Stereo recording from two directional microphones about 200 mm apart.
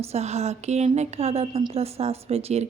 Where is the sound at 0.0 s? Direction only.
30° right (ahead or behind).